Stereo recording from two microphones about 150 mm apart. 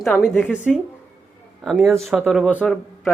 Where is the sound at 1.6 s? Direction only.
Centre (ahead or behind).